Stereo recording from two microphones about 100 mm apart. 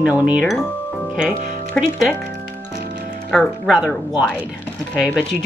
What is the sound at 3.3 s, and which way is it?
Speech, 5° right (ahead or behind).